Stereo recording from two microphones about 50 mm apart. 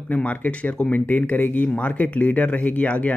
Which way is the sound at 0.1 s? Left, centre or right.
Left.